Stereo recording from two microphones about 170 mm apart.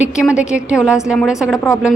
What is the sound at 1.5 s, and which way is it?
Speech, 20° left (ahead or behind).